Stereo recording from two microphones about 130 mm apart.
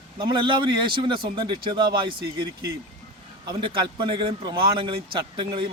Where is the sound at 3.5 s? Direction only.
40° right (ahead or behind).